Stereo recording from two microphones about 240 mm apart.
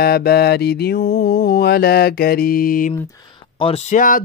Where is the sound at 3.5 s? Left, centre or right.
Left.